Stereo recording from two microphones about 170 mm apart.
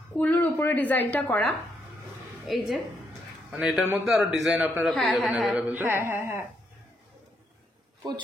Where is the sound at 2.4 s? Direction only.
Centre (ahead or behind).